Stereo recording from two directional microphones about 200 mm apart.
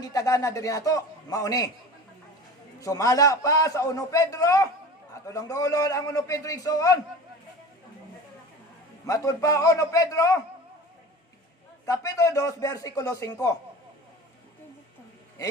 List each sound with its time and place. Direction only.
0.0 s a man's voice: 20° left (ahead or behind)
2.8 s a man's voice: 15° left (ahead or behind)
9.0 s a man's voice: 15° left (ahead or behind)
11.9 s a man's voice: 15° left (ahead or behind)